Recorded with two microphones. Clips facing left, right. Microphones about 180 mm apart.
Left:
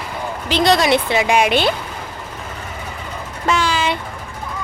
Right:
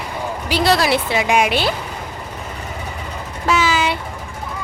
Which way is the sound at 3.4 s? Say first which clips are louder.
Right 1 dB; 5° right (ahead or behind).